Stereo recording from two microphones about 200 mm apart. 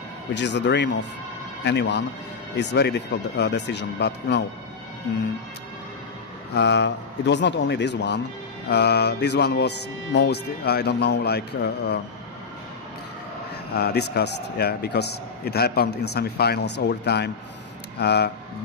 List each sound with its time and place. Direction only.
0.3 s a man's voice: 60° left (ahead or behind)
6.5 s a man's voice: 60° left (ahead or behind)
13.7 s a man's voice: 55° left (ahead or behind)